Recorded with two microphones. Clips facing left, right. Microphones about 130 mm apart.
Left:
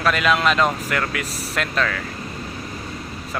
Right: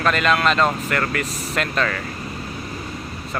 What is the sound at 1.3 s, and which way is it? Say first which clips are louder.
Speech: right 1 dB; 35° left (ahead or behind).